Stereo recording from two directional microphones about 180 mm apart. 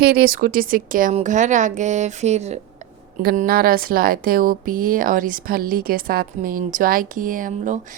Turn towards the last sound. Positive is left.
turn(degrees=-45)  # may be behind; listen again after turning